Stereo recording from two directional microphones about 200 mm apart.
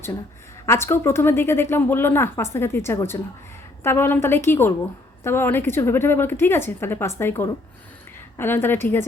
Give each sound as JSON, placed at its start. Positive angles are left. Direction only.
{"t": 0.6, "sound": "speech", "side_deg": 15}